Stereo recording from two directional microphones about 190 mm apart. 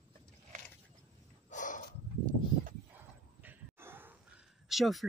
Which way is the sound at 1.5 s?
40° left (ahead or behind).